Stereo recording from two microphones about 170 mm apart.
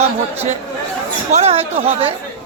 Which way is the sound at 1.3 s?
40° right (ahead or behind).